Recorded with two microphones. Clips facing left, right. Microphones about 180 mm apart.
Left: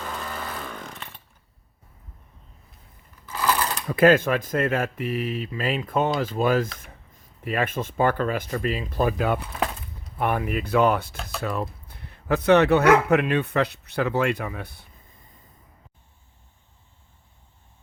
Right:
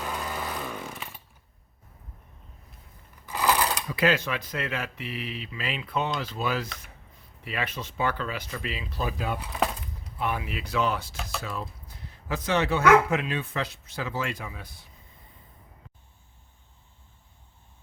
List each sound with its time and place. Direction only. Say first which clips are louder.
0.0 s chainsaw: even; 10° right (ahead or behind)
3.2 s sewing machine: even; 15° right (ahead or behind)
3.8 s speech: left 11 dB; 50° left (ahead or behind)